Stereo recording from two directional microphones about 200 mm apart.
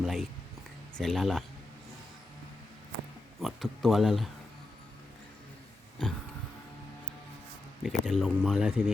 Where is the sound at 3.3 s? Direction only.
Centre (ahead or behind).